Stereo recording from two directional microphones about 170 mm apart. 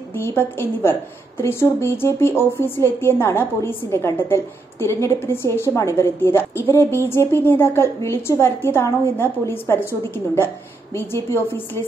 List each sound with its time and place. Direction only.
0.1 s speech: 15° left (ahead or behind)